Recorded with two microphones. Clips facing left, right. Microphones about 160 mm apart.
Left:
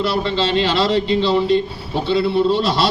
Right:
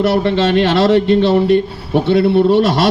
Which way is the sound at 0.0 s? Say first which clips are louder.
Right 6 dB; 60° right (ahead or behind).